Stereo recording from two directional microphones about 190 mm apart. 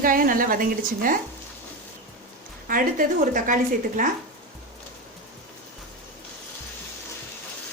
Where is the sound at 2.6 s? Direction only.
45° right (ahead or behind).